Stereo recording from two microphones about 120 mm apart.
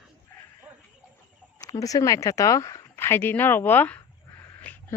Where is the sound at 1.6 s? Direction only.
30° left (ahead or behind).